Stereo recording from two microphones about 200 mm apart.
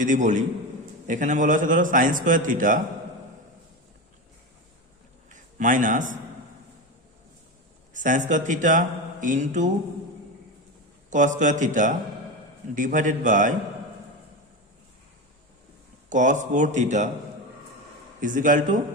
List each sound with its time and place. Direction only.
0.0 s a man's voice: 40° right (ahead or behind)
5.3 s a man's voice: 40° right (ahead or behind)
7.9 s a man's voice: 40° right (ahead or behind)
11.1 s a man's voice: 40° right (ahead or behind)
16.0 s a man's voice: 40° right (ahead or behind)
18.2 s a man's voice: 40° right (ahead or behind)